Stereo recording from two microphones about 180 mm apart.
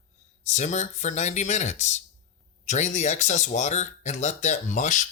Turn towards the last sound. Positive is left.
turn(degrees=45)  # may be behind; listen again after turning